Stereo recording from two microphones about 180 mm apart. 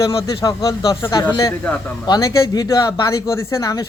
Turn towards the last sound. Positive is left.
turn(degrees=20)  # may be behind; listen again after turning